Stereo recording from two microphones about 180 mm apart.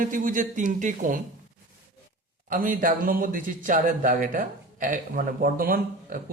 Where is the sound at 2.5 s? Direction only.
50° right (ahead or behind).